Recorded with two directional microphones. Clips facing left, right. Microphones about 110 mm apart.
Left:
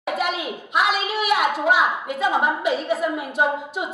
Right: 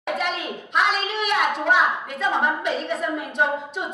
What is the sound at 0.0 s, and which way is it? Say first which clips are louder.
A child's voice: left 2 dB; 5° left (ahead or behind).